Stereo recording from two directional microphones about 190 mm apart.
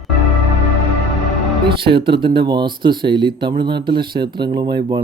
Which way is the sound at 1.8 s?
25° right (ahead or behind).